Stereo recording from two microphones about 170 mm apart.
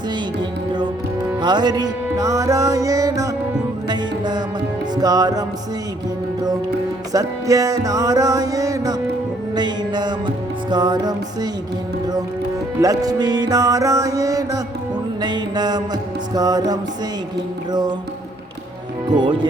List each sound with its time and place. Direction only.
1.4 s music: 25° right (ahead or behind)
7.1 s music: 20° right (ahead or behind)
12.8 s music: 20° right (ahead or behind)
19.1 s music: 25° right (ahead or behind)